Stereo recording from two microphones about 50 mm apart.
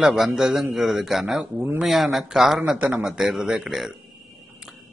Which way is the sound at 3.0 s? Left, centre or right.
Centre.